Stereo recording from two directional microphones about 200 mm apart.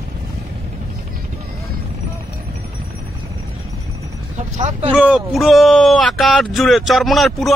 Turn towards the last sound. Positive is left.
turn(degrees=0)  # may be behind; listen again after turning